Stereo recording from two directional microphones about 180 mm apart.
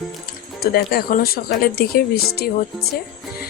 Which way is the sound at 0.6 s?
60° left (ahead or behind).